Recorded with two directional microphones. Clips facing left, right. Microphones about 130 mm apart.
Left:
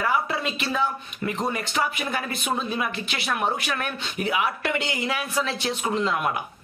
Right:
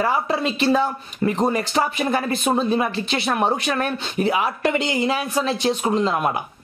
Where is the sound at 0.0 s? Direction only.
30° right (ahead or behind).